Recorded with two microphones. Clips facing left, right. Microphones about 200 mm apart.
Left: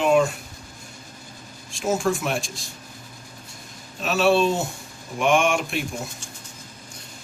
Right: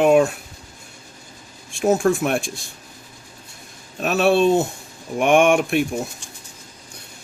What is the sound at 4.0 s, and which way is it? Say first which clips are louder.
Speech: right 3 dB; 55° right (ahead or behind).